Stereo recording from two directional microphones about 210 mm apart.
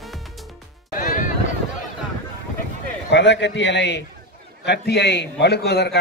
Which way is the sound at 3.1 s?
55° left (ahead or behind).